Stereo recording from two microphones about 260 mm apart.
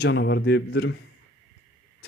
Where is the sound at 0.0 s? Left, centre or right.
Left.